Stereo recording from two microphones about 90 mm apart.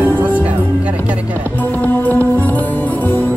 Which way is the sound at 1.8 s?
20° left (ahead or behind).